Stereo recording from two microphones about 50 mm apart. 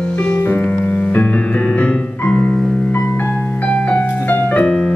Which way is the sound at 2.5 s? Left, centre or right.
Left.